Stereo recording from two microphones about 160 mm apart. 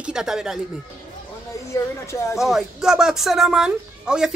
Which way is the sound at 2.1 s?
20° left (ahead or behind).